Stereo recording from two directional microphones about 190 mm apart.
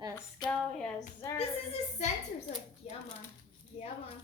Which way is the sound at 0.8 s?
5° left (ahead or behind).